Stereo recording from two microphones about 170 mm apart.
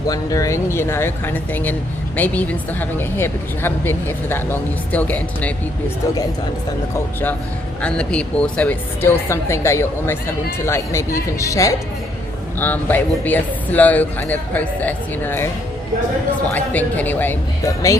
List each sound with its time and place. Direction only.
0.1 s speech: 20° left (ahead or behind)
7.8 s a woman's voice: 5° left (ahead or behind)
16.5 s speech: 10° left (ahead or behind)